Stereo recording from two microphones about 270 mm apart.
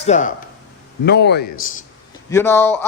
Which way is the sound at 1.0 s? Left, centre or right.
Left.